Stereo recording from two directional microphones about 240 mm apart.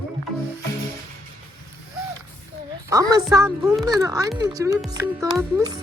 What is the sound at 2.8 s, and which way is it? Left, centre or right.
Speech, centre.